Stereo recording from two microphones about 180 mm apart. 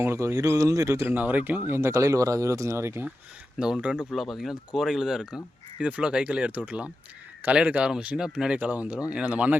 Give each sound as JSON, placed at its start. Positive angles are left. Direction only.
{"t": 0.0, "sound": "speech", "side_deg": -15}